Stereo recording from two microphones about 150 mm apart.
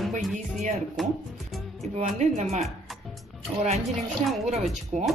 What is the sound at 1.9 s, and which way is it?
Speech, 50° right (ahead or behind).